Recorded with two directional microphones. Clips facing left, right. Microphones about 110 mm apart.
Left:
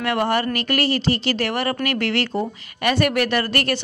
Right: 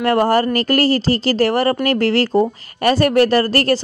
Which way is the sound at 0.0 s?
35° right (ahead or behind).